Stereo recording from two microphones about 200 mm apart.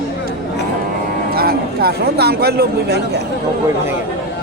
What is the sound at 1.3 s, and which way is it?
Speech, 50° right (ahead or behind).